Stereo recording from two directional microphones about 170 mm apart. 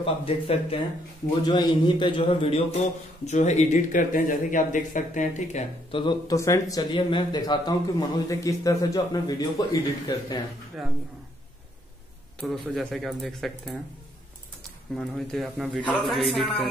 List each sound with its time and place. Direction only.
0.0 s a man's voice: 35° left (ahead or behind)
5.9 s a man's voice: 30° left (ahead or behind)
10.8 s a man's voice: centre (ahead or behind)
12.4 s a man's voice: centre (ahead or behind)
15.0 s a man's voice: centre (ahead or behind)